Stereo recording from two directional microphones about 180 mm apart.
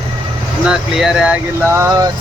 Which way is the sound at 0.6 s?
5° right (ahead or behind).